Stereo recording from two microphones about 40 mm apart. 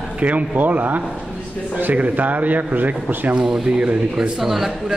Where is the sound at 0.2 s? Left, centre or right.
Right.